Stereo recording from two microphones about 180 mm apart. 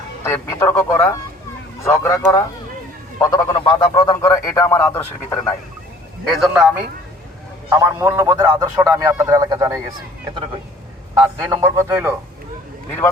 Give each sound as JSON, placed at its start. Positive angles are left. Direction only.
{"t": 0.3, "sound": "speech", "side_deg": 15}
{"t": 6.2, "sound": "a man's voice", "side_deg": 0}
{"t": 11.1, "sound": "a man's voice", "side_deg": -20}